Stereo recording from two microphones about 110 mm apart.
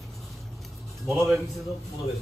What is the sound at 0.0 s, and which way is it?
Vehicle, centre (ahead or behind).